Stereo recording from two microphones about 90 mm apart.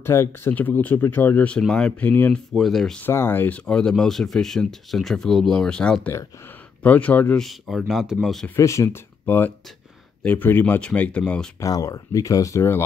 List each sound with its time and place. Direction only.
0.0 s speech: 25° left (ahead or behind)
2.5 s speech: centre (ahead or behind)
3.0 s speech: 25° left (ahead or behind)
7.3 s speech: centre (ahead or behind)
8.5 s speech: 35° left (ahead or behind); by 11.5 s 10° left (ahead or behind)
11.6 s speech: 40° left (ahead or behind)